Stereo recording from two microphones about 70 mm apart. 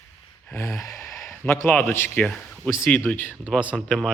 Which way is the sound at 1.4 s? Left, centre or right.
Left.